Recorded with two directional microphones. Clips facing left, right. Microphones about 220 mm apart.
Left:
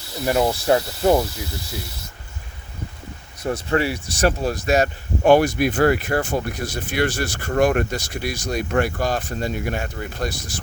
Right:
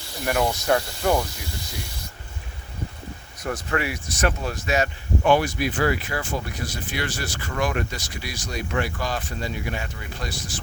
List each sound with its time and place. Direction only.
0.3 s speech: 25° left (ahead or behind)
3.4 s speech: 30° left (ahead or behind); by 10.3 s 50° left (ahead or behind)